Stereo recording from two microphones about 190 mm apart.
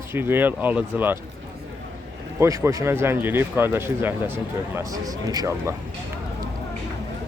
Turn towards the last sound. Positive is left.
turn(degrees=-20)  # may be behind; listen again after turning